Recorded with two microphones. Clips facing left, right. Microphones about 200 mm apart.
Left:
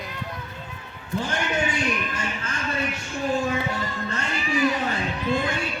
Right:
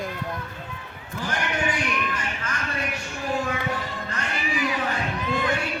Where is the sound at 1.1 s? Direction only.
25° left (ahead or behind).